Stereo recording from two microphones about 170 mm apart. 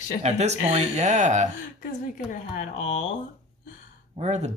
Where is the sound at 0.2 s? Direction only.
40° right (ahead or behind).